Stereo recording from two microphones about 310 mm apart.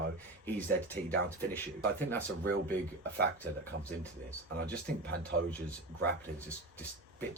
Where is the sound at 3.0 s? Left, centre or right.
Right.